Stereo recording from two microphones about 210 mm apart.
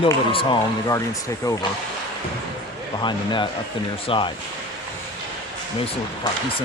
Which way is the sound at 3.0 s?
20° left (ahead or behind).